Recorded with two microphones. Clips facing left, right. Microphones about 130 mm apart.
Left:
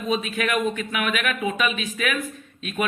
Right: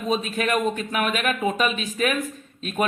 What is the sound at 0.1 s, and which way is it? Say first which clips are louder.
A man's voice: right 1 dB; 35° right (ahead or behind).